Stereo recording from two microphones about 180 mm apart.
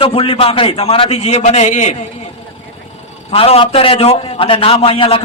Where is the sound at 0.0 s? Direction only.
30° left (ahead or behind).